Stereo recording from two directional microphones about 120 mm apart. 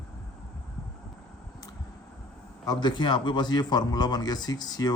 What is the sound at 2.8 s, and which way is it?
Speech, 40° left (ahead or behind).